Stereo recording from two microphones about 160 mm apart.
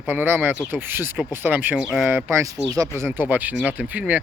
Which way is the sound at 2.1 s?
20° right (ahead or behind).